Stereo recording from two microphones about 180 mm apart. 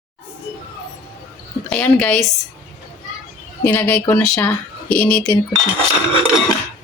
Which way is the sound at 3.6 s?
10° left (ahead or behind).